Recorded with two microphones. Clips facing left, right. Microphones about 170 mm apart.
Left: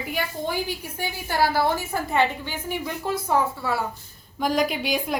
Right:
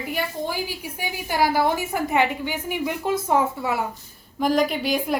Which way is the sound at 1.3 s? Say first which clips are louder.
Right 1 dB; 15° right (ahead or behind).